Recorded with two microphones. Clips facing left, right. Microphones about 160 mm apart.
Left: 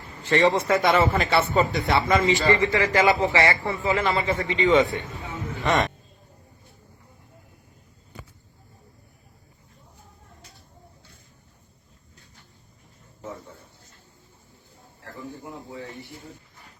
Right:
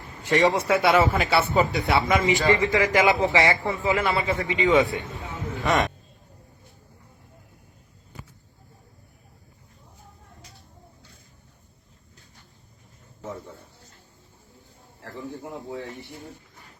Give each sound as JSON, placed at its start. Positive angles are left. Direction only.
{"t": 0.3, "sound": "speech", "side_deg": -15}
{"t": 4.3, "sound": "a man's voice", "side_deg": 0}